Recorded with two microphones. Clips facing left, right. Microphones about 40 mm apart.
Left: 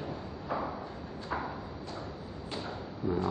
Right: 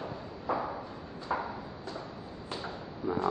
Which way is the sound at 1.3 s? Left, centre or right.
Centre.